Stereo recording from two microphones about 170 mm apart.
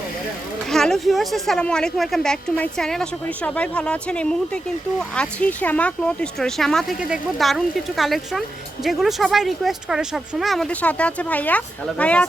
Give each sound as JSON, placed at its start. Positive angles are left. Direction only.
{"t": 0.7, "sound": "speech", "side_deg": 0}